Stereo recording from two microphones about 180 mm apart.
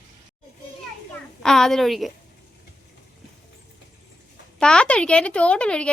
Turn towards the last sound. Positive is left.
turn(degrees=5)  # may be behind; listen again after turning